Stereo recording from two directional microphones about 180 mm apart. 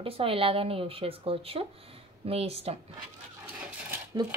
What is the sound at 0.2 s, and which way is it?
Speech, 30° right (ahead or behind).